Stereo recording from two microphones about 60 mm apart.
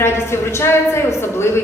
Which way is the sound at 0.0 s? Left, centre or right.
Left.